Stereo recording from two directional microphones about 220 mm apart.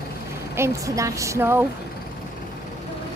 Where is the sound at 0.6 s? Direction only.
15° right (ahead or behind).